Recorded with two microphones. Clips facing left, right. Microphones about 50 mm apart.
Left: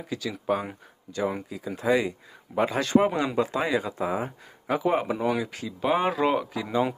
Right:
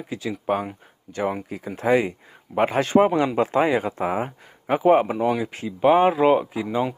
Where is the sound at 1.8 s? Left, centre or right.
Right.